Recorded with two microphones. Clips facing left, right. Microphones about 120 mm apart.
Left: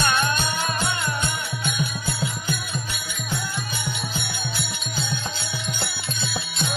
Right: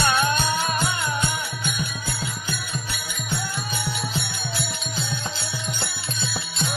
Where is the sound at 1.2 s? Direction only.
5° right (ahead or behind).